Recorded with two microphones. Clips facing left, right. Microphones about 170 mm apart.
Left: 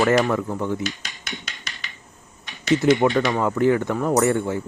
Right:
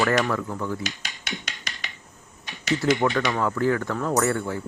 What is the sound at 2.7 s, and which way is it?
Speech, 20° left (ahead or behind).